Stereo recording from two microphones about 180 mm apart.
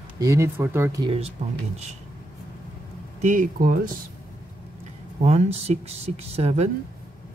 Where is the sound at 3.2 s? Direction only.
45° right (ahead or behind).